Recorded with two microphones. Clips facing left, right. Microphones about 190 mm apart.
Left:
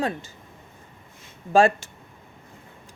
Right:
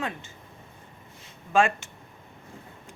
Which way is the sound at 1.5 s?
35° left (ahead or behind).